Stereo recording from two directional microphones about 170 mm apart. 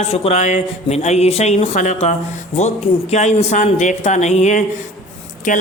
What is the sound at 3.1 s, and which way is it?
A man's voice, 40° left (ahead or behind).